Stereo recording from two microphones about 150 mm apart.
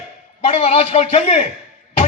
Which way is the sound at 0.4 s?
45° left (ahead or behind).